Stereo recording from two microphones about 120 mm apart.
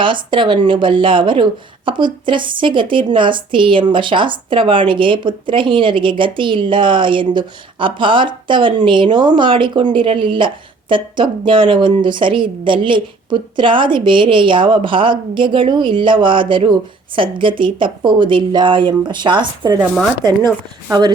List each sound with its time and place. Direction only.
0.0 s speech: 45° right (ahead or behind)